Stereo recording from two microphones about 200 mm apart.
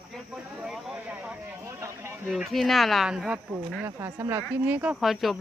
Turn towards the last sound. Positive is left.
turn(degrees=0)  # may be behind; listen again after turning